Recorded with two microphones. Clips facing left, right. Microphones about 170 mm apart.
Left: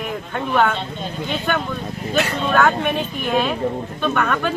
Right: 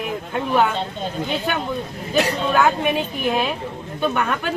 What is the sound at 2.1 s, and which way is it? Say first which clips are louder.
Speech: even; 10° right (ahead or behind).